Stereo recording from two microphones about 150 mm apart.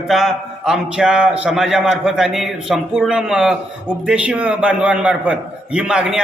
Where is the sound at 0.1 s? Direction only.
Centre (ahead or behind).